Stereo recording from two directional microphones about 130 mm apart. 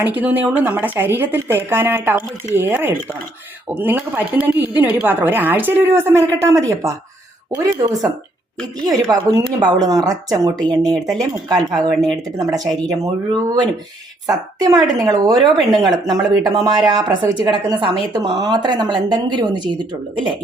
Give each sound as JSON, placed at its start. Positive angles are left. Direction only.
{"t": 0.0, "sound": "a woman's voice", "side_deg": -10}